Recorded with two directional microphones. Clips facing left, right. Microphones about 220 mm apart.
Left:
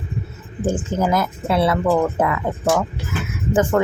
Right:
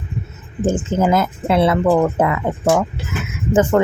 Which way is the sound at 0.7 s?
25° right (ahead or behind).